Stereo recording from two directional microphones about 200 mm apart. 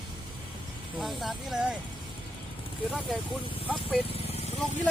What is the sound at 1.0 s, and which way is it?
Speech, centre (ahead or behind).